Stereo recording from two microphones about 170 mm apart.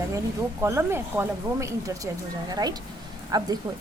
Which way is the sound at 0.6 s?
15° right (ahead or behind).